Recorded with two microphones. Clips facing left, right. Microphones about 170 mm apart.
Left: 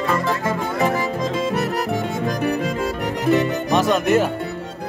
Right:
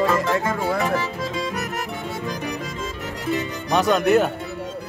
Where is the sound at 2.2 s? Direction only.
55° left (ahead or behind).